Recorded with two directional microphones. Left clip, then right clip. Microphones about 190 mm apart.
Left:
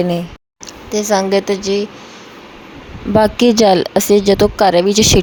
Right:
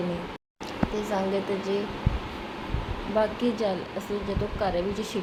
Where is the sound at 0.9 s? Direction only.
55° left (ahead or behind).